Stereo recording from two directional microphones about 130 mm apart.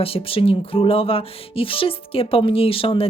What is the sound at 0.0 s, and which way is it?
Music, 45° left (ahead or behind).